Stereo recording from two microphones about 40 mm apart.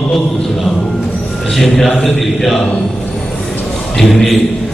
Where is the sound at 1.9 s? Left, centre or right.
Centre.